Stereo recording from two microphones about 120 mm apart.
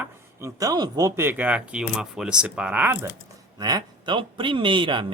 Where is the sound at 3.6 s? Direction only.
30° right (ahead or behind).